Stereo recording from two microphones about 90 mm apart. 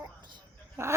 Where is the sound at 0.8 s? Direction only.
30° right (ahead or behind).